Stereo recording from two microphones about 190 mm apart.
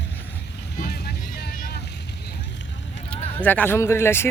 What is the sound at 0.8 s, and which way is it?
Boat, 60° left (ahead or behind).